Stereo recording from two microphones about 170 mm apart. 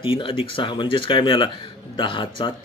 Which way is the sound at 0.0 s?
30° left (ahead or behind).